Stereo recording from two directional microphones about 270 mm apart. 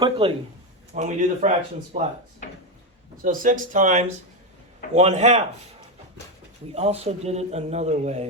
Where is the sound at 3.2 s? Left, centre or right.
Right.